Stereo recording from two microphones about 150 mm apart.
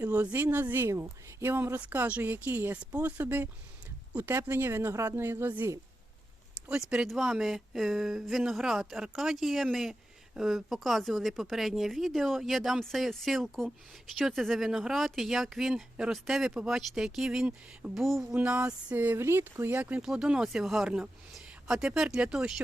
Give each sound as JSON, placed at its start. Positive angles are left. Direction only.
{"t": 0.0, "sound": "speech", "side_deg": -10}